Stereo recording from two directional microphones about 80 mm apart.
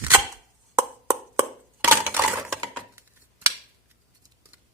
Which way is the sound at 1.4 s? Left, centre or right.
Right.